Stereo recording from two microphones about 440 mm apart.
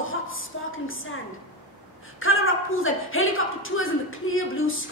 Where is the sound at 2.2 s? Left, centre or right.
Left.